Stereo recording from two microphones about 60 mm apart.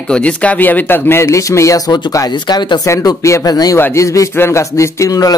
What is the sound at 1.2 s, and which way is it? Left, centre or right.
Speech, left.